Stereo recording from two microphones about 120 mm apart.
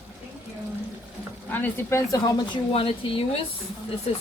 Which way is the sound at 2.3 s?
35° left (ahead or behind).